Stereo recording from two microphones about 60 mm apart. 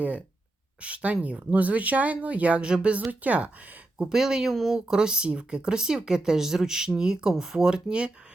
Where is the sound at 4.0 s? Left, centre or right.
Centre.